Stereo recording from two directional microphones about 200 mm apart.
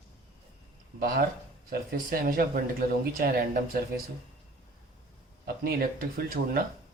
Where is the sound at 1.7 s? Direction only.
45° right (ahead or behind).